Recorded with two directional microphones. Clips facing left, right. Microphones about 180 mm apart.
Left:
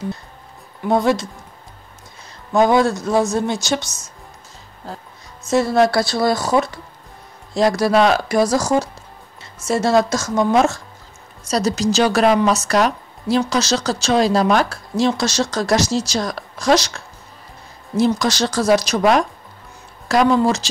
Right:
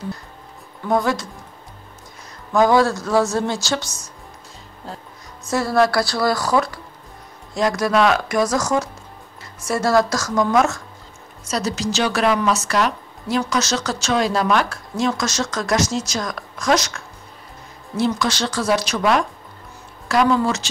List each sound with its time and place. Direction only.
0.8 s speech: 25° left (ahead or behind)
2.5 s speech: 20° left (ahead or behind)
5.5 s speech: 25° left (ahead or behind)
7.5 s speech: 35° left (ahead or behind)